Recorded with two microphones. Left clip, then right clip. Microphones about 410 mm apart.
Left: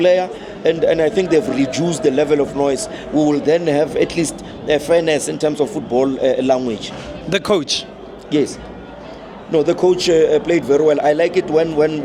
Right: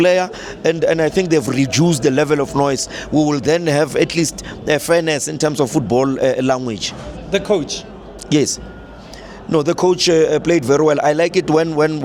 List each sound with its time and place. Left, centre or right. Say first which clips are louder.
0.0 s a man's voice: even; right
7.3 s speech: left 1 dB; left
8.3 s a man's voice: right 1 dB; right